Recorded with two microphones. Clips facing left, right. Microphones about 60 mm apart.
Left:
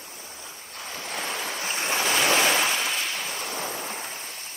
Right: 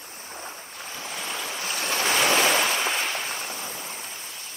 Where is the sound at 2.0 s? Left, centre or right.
Centre.